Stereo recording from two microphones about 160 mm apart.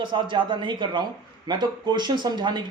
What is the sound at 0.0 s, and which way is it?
Speech, 30° right (ahead or behind).